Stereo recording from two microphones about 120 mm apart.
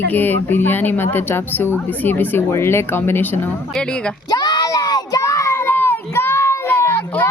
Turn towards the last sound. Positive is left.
turn(degrees=15)  # may be behind; listen again after turning